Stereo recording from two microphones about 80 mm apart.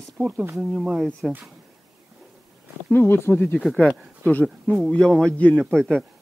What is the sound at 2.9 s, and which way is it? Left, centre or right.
Speech, left.